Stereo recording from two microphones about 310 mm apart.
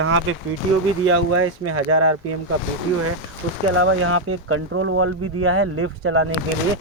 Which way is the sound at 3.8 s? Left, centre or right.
Right.